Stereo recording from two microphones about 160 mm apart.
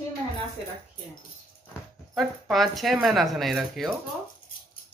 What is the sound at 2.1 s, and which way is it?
Speech, centre (ahead or behind).